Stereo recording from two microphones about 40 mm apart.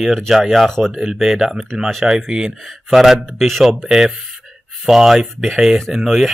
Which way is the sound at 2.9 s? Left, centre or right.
Centre.